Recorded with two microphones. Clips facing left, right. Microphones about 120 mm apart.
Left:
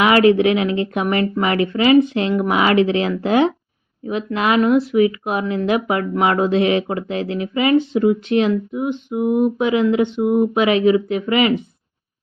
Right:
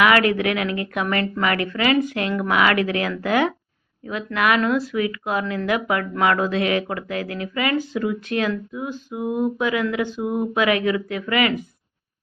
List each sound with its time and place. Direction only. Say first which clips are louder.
0.0 s speech: left 5 dB; 25° left (ahead or behind)